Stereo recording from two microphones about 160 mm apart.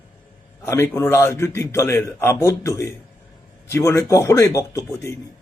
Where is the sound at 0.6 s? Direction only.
15° left (ahead or behind).